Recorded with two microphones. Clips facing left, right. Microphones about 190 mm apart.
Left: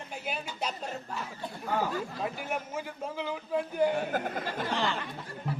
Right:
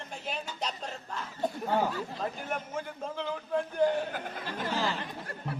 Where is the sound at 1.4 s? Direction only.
45° right (ahead or behind).